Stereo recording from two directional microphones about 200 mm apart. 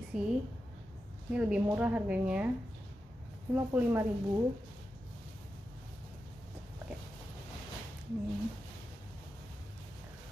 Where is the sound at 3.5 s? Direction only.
10° right (ahead or behind).